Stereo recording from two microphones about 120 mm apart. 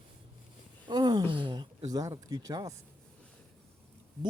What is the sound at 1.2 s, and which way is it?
Speech, 45° right (ahead or behind).